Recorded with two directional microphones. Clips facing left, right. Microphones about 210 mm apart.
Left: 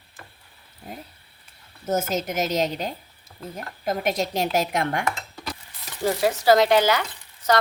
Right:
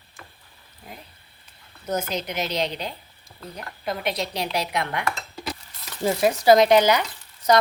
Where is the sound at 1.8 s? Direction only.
45° left (ahead or behind).